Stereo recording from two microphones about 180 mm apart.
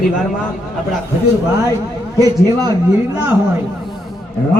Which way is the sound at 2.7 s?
15° right (ahead or behind).